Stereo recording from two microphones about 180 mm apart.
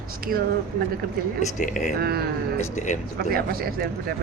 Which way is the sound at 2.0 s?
60° right (ahead or behind).